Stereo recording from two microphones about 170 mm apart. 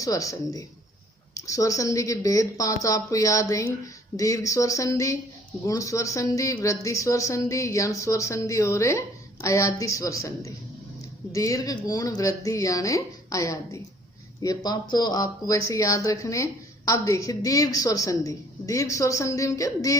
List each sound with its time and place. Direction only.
0.0 s speech: 20° left (ahead or behind)